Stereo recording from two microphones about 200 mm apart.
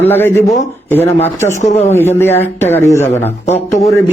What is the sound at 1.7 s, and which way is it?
Speech, 30° left (ahead or behind).